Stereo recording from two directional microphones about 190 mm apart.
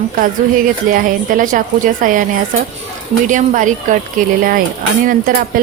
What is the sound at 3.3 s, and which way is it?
Speech, 40° right (ahead or behind).